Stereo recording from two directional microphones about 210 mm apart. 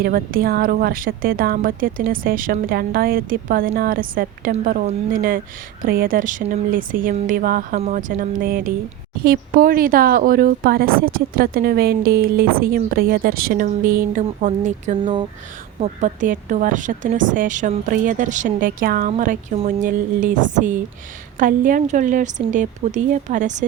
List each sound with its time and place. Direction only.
0.0 s speech: 45° right (ahead or behind)